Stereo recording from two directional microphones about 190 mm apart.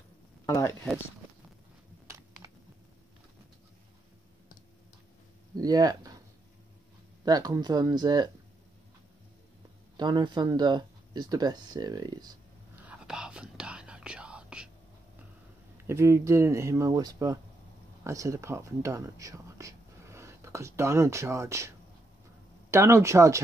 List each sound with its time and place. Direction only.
0.5 s speech: 15° left (ahead or behind)
5.6 s speech: 20° right (ahead or behind)
7.2 s speech: 20° right (ahead or behind)
9.9 s speech: 25° right (ahead or behind)
12.7 s whispering: 5° right (ahead or behind)
15.8 s speech: 15° right (ahead or behind)